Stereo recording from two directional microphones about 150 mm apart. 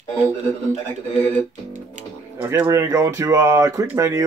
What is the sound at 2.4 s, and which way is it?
A man's voice, 20° right (ahead or behind).